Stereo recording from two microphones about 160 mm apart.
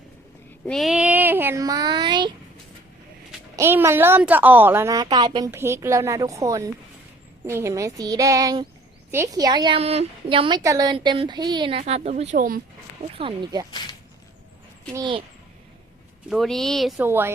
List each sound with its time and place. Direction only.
0.7 s speech: centre (ahead or behind); by 2.3 s 30° right (ahead or behind)
3.5 s a woman's voice: 15° right (ahead or behind)
9.7 s speech: 40° right (ahead or behind)
10.6 s a woman's voice: 20° right (ahead or behind)
10.9 s a woman's voice: 30° right (ahead or behind)
11.8 s speech: 45° right (ahead or behind); by 12.6 s 60° right (ahead or behind)
13.1 s a woman's voice: 30° right (ahead or behind)
16.3 s speech: centre (ahead or behind)
17.0 s a woman's voice: 15° right (ahead or behind)